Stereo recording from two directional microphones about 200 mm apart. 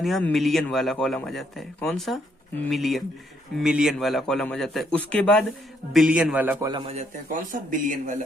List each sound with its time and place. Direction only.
0.0 s a man's voice: 5° left (ahead or behind)
6.7 s speech: 25° right (ahead or behind)